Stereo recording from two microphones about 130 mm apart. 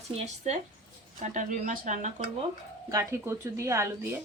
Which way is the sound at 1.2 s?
70° right (ahead or behind).